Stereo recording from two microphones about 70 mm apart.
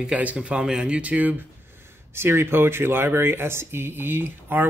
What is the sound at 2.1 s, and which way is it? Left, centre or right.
Speech, right.